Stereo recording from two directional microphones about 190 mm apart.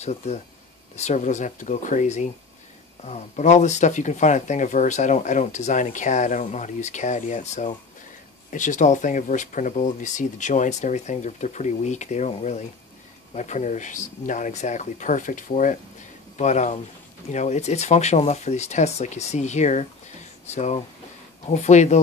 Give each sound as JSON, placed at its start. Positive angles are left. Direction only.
{"t": 0.0, "sound": "speech", "side_deg": 35}